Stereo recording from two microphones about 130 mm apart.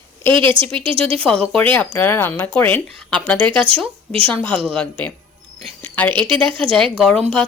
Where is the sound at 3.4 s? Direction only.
40° right (ahead or behind).